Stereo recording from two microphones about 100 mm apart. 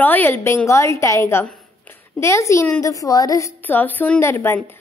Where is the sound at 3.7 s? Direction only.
20° left (ahead or behind).